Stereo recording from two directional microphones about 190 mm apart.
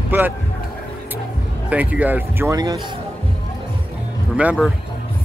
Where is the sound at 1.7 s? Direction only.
10° right (ahead or behind).